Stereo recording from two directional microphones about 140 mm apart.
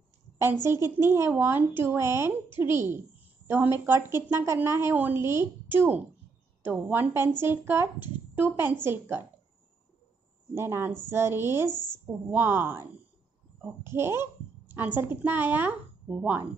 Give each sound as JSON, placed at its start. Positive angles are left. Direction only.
{"t": 0.7, "sound": "a woman's voice", "side_deg": -20}
{"t": 10.5, "sound": "a woman's voice", "side_deg": -20}
{"t": 13.8, "sound": "a sound", "side_deg": -20}
{"t": 15.0, "sound": "a woman's voice", "side_deg": -15}